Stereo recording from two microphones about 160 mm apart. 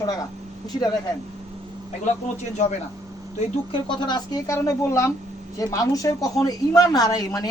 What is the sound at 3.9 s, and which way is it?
A man's voice, 25° left (ahead or behind).